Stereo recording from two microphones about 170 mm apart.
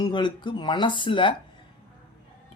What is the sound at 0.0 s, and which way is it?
Speech, 25° left (ahead or behind).